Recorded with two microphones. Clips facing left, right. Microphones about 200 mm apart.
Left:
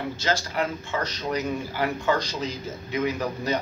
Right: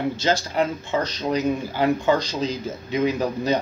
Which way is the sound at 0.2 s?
25° right (ahead or behind).